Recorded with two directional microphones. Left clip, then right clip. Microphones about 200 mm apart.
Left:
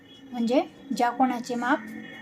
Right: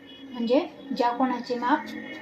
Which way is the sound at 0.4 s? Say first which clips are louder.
Right 1 dB; 30° left (ahead or behind).